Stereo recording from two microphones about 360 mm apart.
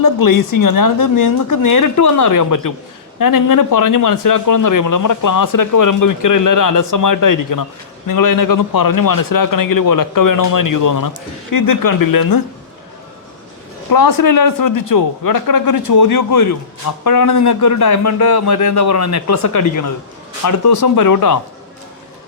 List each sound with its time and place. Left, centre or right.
0.0 s speech: left
13.9 s speech: left